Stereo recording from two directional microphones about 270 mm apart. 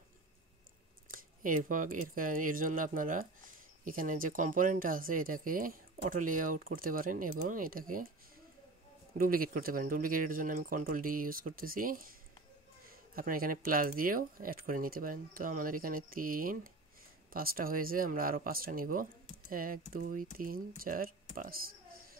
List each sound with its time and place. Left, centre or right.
1.1 s speech: right
9.2 s speech: right